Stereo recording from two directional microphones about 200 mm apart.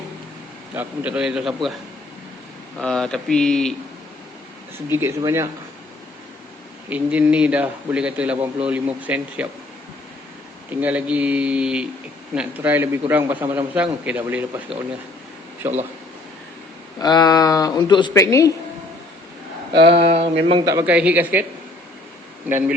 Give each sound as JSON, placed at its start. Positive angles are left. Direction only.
{"t": 0.7, "sound": "speech", "side_deg": -10}
{"t": 2.7, "sound": "speech", "side_deg": 5}
{"t": 4.9, "sound": "a man's voice", "side_deg": -10}
{"t": 6.9, "sound": "a man's voice", "side_deg": -5}
{"t": 10.7, "sound": "a man's voice", "side_deg": -10}
{"t": 17.0, "sound": "speech", "side_deg": 20}
{"t": 19.7, "sound": "a man's voice", "side_deg": -25}